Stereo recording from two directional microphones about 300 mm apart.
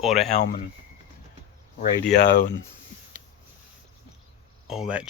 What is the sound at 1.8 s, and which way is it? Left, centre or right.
Speech, left.